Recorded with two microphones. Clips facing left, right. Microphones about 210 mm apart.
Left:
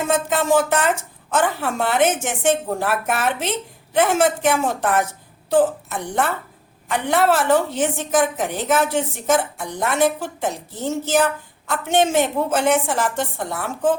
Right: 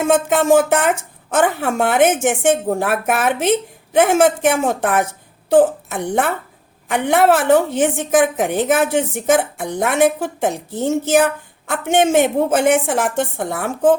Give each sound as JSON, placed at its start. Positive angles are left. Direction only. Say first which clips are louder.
{"t": 0.1, "sound": "a woman's voice", "louder": "right 5 dB", "side_deg": -50}